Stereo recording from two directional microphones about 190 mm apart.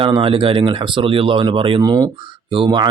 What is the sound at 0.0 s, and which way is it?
Speech, 25° right (ahead or behind).